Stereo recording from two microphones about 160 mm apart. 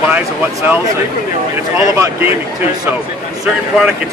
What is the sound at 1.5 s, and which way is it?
Speech, 15° right (ahead or behind).